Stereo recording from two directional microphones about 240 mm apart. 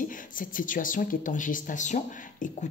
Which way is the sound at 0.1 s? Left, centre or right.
Left.